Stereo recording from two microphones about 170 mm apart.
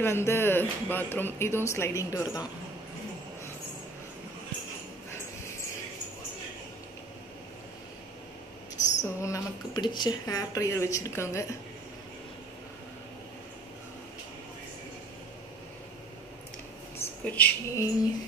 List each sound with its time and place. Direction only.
0.0 s speech: 15° left (ahead or behind)
9.0 s speech: 20° left (ahead or behind)
17.0 s speech: 10° left (ahead or behind)